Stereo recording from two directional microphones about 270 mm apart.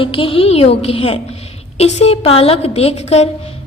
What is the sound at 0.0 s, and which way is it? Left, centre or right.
A woman's voice, centre.